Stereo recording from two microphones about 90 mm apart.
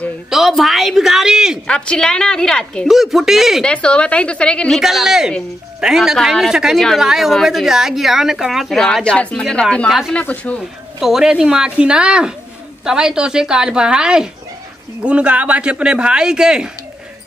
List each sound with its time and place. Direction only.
0.3 s speech: centre (ahead or behind)
1.7 s a woman's voice: 10° left (ahead or behind)
2.9 s speech: centre (ahead or behind)
3.6 s a woman's voice: 10° left (ahead or behind)
4.7 s a woman's voice: 5° right (ahead or behind)
9.8 s speech: centre (ahead or behind)
10.1 s a woman's voice: 15° left (ahead or behind)
11.0 s speech: 5° right (ahead or behind)